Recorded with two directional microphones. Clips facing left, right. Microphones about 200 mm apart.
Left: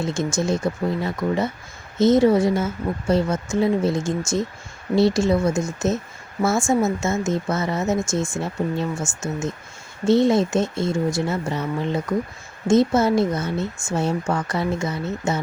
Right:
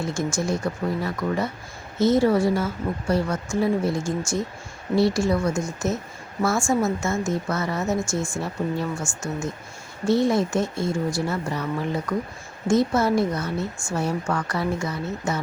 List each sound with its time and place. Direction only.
0.0 s speech: 20° left (ahead or behind)